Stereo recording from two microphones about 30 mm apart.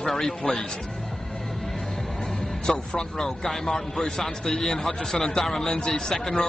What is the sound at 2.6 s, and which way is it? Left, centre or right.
Speech, left.